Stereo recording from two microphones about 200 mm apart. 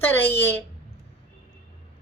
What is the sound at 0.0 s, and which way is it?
Speech, 10° left (ahead or behind).